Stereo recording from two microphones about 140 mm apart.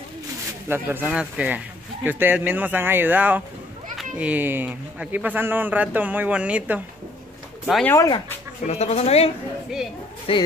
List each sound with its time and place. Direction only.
0.7 s a man's voice: 15° right (ahead or behind)
3.9 s children playing: centre (ahead or behind)
4.3 s a man's voice: 15° right (ahead or behind)
8.6 s speech: 50° left (ahead or behind)